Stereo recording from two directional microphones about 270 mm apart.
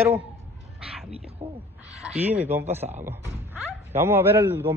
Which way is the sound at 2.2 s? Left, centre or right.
Centre.